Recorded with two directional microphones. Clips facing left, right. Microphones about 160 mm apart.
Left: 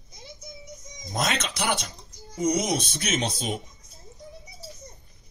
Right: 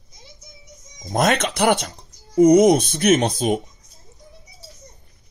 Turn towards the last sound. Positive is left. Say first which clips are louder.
# right 10 dB
turn(degrees=-55)  # may be behind; listen again after turning